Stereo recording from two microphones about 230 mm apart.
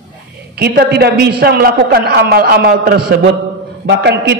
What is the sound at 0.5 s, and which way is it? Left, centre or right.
A man's voice, right.